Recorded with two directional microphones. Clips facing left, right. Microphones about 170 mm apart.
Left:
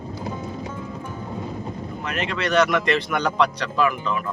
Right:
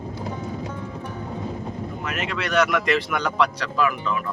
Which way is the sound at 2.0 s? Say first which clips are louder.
Left 3 dB; 5° right (ahead or behind).